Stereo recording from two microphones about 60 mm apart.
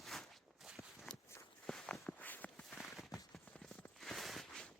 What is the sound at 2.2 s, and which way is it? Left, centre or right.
Walk, left.